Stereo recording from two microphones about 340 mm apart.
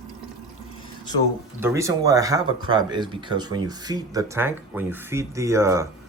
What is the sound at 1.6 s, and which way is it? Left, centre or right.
Speech, centre.